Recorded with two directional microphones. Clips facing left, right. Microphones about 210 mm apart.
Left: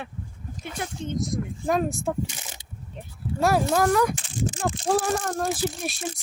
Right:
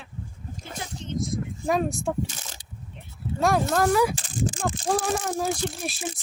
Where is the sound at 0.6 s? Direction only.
60° left (ahead or behind).